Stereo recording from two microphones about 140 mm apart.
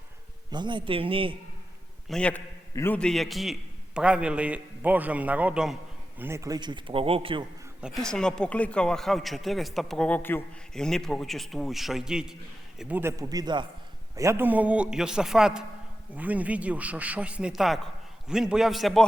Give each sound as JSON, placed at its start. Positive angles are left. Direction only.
{"t": 0.5, "sound": "a man's voice", "side_deg": -35}
{"t": 2.0, "sound": "a man's voice", "side_deg": 5}
{"t": 6.1, "sound": "a man's voice", "side_deg": -20}
{"t": 7.8, "sound": "speech", "side_deg": -5}
{"t": 8.0, "sound": "speech", "side_deg": 5}
{"t": 14.2, "sound": "a man's voice", "side_deg": -20}